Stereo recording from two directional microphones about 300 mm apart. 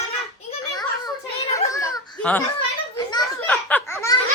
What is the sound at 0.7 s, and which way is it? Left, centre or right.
Children playing, centre.